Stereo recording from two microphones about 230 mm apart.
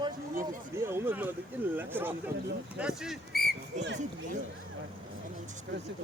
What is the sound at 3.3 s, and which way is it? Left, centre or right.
Speech, left.